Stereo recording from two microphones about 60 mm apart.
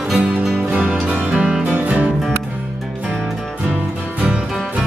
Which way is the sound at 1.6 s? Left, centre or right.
Right.